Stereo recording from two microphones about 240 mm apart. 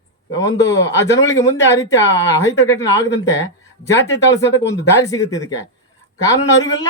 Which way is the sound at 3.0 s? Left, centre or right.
Left.